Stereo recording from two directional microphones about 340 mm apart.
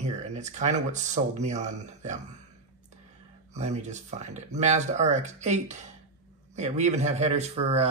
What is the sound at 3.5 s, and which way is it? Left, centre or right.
Speech, right.